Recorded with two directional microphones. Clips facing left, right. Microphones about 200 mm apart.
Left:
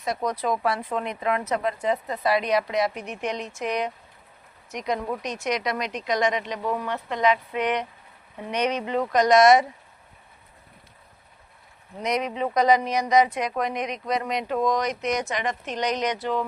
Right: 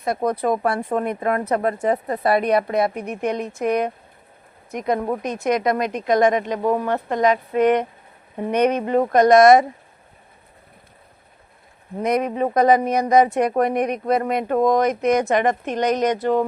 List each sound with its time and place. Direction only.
0.0 s speech: 55° right (ahead or behind)
11.9 s speech: 55° right (ahead or behind)